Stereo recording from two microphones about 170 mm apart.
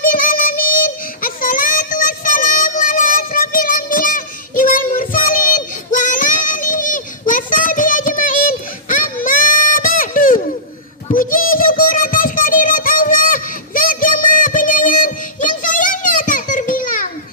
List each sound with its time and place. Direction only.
0.0 s child singing: 55° left (ahead or behind)
11.1 s music: 55° left (ahead or behind)